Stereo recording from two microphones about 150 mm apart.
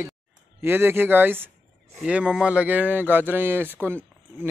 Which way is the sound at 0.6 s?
15° right (ahead or behind).